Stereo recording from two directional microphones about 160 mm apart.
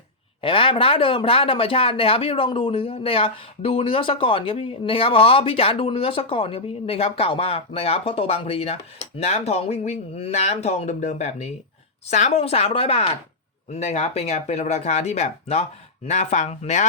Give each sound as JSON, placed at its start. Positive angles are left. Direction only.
{"t": 0.4, "sound": "speech", "side_deg": 35}